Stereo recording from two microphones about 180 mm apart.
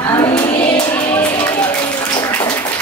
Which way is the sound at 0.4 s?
25° left (ahead or behind).